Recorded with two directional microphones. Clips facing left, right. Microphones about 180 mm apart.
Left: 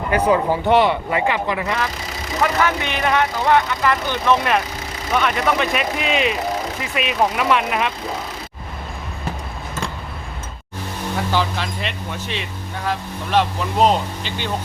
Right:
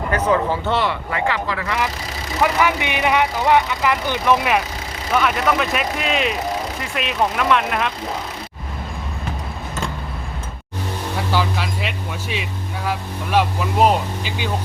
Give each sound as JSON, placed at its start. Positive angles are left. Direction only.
{"t": 0.1, "sound": "speech", "side_deg": 15}
{"t": 2.4, "sound": "speech", "side_deg": -15}
{"t": 11.2, "sound": "speech", "side_deg": -5}